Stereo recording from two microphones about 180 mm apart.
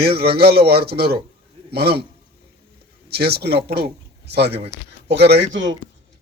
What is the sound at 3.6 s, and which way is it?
A man's voice, 60° right (ahead or behind).